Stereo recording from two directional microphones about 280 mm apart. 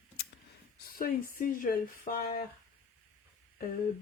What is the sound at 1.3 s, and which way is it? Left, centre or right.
Speech, left.